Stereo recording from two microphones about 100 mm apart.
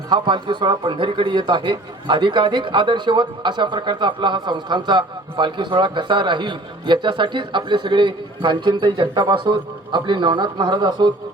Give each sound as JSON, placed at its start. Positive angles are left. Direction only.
{"t": 0.1, "sound": "a man's voice", "side_deg": -50}